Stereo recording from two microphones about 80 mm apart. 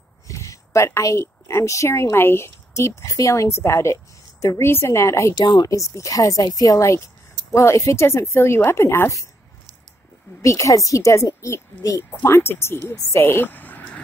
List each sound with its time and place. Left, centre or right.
0.3 s a woman's voice: left
5.3 s speech: left
5.7 s speech: left
10.4 s speech: left